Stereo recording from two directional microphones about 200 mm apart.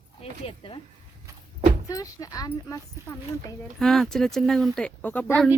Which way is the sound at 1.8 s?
15° left (ahead or behind).